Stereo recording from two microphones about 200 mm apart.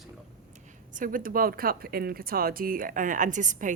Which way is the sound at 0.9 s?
45° right (ahead or behind).